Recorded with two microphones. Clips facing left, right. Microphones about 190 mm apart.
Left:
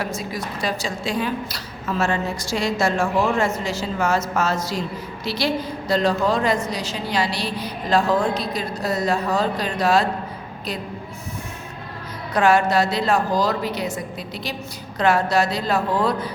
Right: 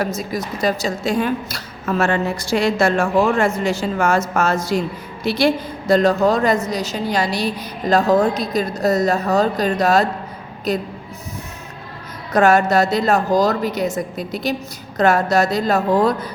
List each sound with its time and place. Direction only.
0.0 s a woman's voice: 40° right (ahead or behind)
12.3 s a woman's voice: 45° right (ahead or behind)